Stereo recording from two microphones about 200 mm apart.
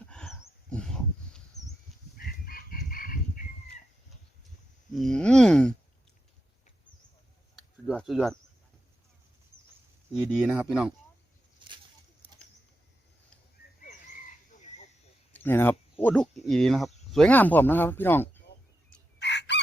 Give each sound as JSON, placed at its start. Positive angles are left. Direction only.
{"t": 0.0, "sound": "a sound", "side_deg": 5}
{"t": 2.1, "sound": "chicken", "side_deg": 45}
{"t": 4.9, "sound": "speech", "side_deg": 0}
{"t": 7.5, "sound": "a sound", "side_deg": 0}
{"t": 10.1, "sound": "speech", "side_deg": -5}
{"t": 11.6, "sound": "a sound", "side_deg": -25}
{"t": 14.5, "sound": "frog", "side_deg": 35}
{"t": 15.3, "sound": "speech", "side_deg": 10}
{"t": 19.2, "sound": "chicken", "side_deg": 60}